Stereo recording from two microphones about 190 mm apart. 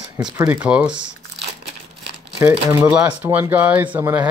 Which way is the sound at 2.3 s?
15° right (ahead or behind).